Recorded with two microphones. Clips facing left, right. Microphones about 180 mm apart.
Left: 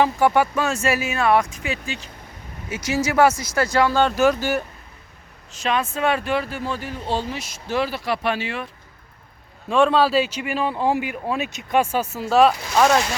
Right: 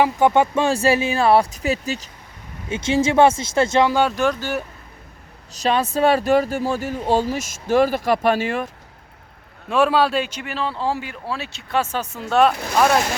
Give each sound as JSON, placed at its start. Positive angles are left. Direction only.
{"t": 0.0, "sound": "speech", "side_deg": -20}
{"t": 2.6, "sound": "speech", "side_deg": -25}
{"t": 4.1, "sound": "speech", "side_deg": 5}
{"t": 5.5, "sound": "speech", "side_deg": -35}
{"t": 9.6, "sound": "speech", "side_deg": -5}